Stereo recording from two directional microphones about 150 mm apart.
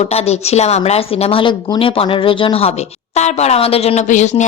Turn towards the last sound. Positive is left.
turn(degrees=50)  # may be behind; listen again after turning